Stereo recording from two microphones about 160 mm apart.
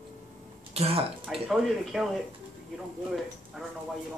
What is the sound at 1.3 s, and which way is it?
Speech, centre (ahead or behind).